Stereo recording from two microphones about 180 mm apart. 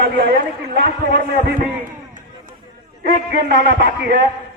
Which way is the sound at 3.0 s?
60° right (ahead or behind).